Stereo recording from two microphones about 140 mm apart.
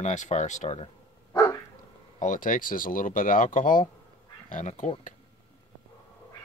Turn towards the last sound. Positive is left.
turn(degrees=60)  # may be behind; listen again after turning